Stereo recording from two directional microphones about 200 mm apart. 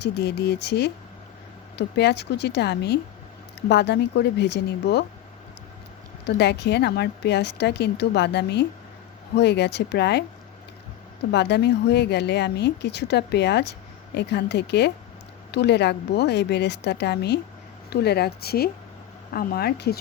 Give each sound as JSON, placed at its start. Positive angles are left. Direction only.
{"t": 0.0, "sound": "speech", "side_deg": 55}
{"t": 2.0, "sound": "speech", "side_deg": 55}
{"t": 6.2, "sound": "speech", "side_deg": 55}
{"t": 11.3, "sound": "a woman's voice", "side_deg": 55}